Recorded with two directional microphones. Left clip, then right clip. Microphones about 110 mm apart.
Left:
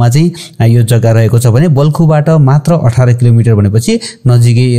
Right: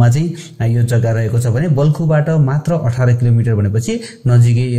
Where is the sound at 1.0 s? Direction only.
60° left (ahead or behind).